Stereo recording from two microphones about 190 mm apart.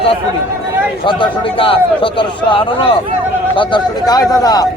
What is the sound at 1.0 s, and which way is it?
A man's voice, 25° left (ahead or behind).